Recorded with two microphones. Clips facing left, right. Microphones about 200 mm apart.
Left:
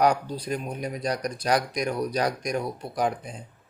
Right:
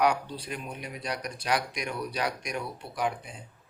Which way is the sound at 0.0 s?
40° left (ahead or behind).